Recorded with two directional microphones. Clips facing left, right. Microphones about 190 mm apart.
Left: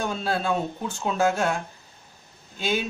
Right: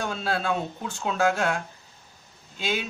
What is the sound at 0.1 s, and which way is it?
Speech, centre (ahead or behind).